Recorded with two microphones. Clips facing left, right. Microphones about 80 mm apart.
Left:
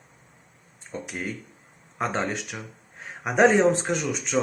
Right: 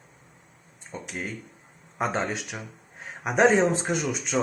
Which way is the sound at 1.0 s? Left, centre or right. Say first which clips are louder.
Even; centre.